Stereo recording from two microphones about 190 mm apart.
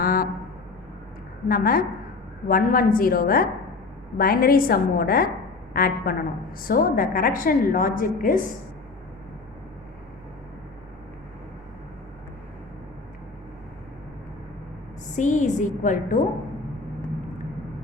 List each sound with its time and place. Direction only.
0.0 s a sound: 50° left (ahead or behind)
1.5 s a woman's voice: 50° left (ahead or behind)
15.1 s a woman's voice: 40° left (ahead or behind)